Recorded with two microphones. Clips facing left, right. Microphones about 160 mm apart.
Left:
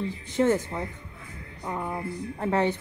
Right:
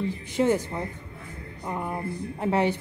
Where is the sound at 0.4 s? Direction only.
20° right (ahead or behind).